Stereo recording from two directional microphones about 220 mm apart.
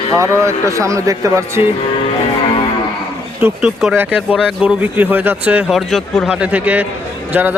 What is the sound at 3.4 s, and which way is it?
Speech, 5° right (ahead or behind).